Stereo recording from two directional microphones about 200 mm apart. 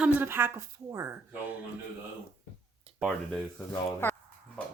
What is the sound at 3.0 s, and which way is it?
Speech, centre (ahead or behind).